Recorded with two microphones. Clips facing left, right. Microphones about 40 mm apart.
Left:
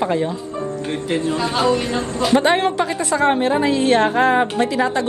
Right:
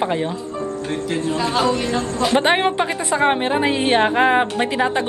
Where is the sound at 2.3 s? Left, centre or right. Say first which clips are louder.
Left 2 dB; right.